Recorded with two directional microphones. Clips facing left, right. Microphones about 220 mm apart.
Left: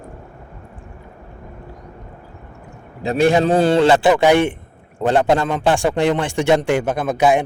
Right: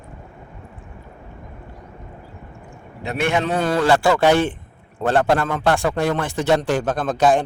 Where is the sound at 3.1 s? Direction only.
35° left (ahead or behind).